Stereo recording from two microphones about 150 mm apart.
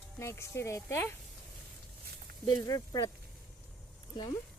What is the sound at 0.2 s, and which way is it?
Speech, 20° left (ahead or behind).